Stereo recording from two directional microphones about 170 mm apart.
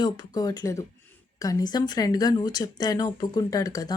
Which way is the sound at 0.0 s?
25° left (ahead or behind).